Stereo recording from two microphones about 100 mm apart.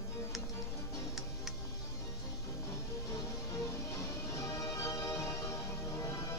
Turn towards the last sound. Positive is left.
turn(degrees=30)  # may be behind; listen again after turning